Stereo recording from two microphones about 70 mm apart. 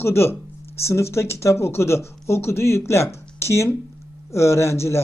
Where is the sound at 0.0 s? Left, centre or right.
Left.